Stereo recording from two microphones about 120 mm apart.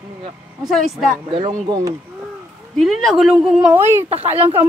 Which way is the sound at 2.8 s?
Centre (ahead or behind).